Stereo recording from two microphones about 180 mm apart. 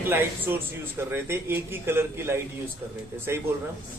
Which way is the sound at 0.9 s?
10° right (ahead or behind).